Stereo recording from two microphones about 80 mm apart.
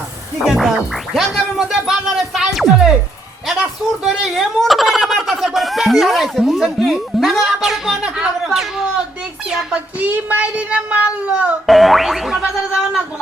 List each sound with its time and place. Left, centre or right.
0.4 s speech: centre
10.0 s a child's voice: right
11.6 s speech: centre